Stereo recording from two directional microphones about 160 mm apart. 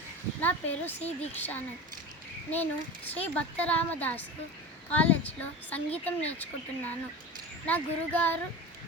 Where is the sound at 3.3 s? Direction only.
10° left (ahead or behind).